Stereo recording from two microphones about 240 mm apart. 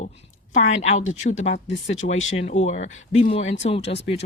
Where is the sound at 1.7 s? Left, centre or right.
Left.